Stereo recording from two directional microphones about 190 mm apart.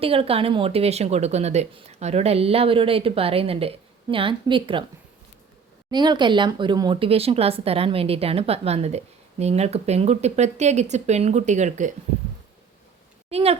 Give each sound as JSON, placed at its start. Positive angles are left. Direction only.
{"t": 0.0, "sound": "speech", "side_deg": -30}
{"t": 5.9, "sound": "speech", "side_deg": -20}
{"t": 13.3, "sound": "speech", "side_deg": -30}